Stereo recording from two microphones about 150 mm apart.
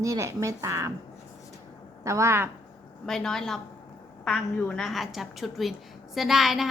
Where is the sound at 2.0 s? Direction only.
20° right (ahead or behind).